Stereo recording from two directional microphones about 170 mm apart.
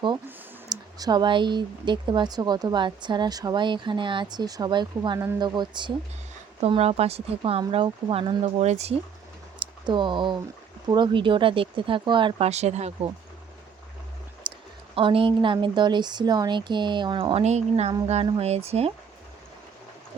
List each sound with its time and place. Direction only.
0.7 s speech: 20° right (ahead or behind)
6.6 s speech: 35° right (ahead or behind)
9.6 s a sound: 30° right (ahead or behind)
10.8 s speech: 25° right (ahead or behind)
14.5 s a sound: 30° right (ahead or behind)
14.9 s speech: 30° right (ahead or behind)